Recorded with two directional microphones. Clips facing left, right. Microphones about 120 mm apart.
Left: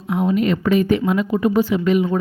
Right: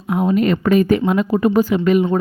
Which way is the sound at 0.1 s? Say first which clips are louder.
Right 2 dB; 45° right (ahead or behind).